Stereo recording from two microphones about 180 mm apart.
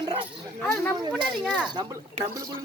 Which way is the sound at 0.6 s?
5° left (ahead or behind).